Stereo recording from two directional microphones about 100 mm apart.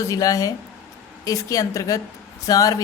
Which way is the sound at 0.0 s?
35° left (ahead or behind).